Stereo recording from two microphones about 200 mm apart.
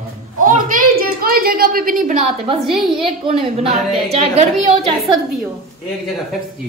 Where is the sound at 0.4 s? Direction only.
45° right (ahead or behind).